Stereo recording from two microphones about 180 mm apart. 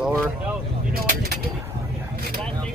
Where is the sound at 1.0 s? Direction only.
55° right (ahead or behind).